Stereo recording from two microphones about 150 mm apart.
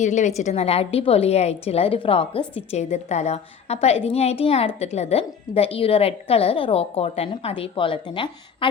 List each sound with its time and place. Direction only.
0.0 s a woman's voice: 55° left (ahead or behind); by 8.7 s 35° left (ahead or behind)